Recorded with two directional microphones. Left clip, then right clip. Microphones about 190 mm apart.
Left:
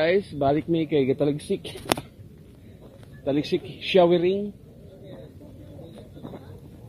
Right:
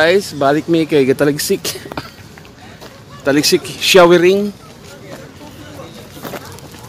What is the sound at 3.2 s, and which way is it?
Speech, 25° right (ahead or behind).